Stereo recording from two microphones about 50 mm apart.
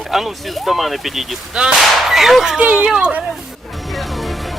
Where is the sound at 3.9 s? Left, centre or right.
Centre.